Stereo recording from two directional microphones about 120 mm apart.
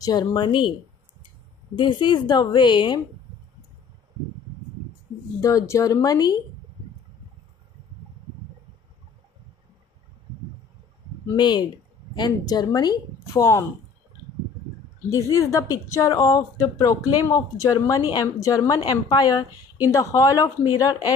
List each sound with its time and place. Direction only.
0.0 s a woman's voice: 35° left (ahead or behind)
1.8 s a woman's voice: 40° left (ahead or behind)
5.4 s speech: 25° left (ahead or behind)
11.3 s a woman's voice: 40° left (ahead or behind)
13.4 s speech: 25° left (ahead or behind)
15.0 s a woman's voice: 25° left (ahead or behind)